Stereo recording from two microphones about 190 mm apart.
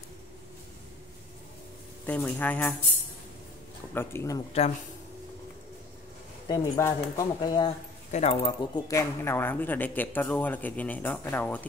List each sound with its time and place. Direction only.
2.0 s speech: 10° left (ahead or behind)
3.9 s speech: 10° left (ahead or behind)
4.5 s speech: 35° left (ahead or behind)
6.4 s speech: 20° left (ahead or behind)
8.1 s speech: 35° left (ahead or behind)
8.7 s speech: 15° left (ahead or behind)